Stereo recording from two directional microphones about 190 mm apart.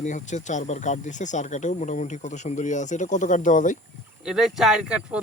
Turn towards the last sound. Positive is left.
turn(degrees=-5)  # may be behind; listen again after turning